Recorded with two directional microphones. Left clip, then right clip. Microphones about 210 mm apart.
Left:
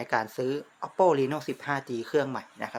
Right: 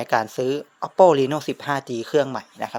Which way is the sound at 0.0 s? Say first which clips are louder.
Right 7 dB; 35° right (ahead or behind).